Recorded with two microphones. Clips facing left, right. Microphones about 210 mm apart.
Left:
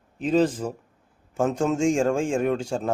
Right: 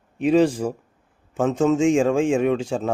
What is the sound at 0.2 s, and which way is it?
A man's voice, 10° right (ahead or behind).